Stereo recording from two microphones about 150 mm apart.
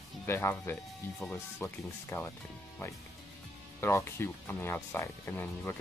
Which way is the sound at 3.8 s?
15° left (ahead or behind).